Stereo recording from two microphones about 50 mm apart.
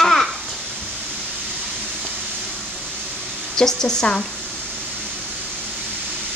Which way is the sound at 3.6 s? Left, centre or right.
Centre.